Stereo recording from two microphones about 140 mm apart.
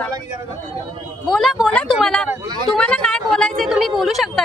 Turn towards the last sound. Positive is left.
turn(degrees=0)  # may be behind; listen again after turning